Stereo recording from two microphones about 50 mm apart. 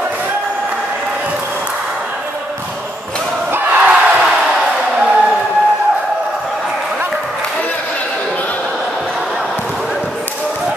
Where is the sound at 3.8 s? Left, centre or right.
Centre.